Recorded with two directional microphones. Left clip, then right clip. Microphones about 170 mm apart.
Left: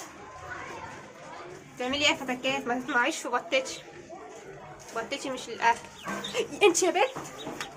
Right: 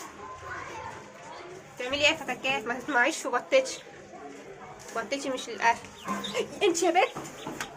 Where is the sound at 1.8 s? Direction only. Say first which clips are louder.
Right 1 dB; 5° left (ahead or behind).